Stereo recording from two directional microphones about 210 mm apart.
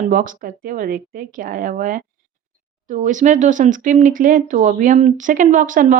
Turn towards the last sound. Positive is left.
turn(degrees=-40)  # may be behind; listen again after turning